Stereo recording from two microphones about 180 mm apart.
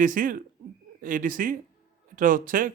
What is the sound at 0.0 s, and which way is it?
Speech, 50° right (ahead or behind).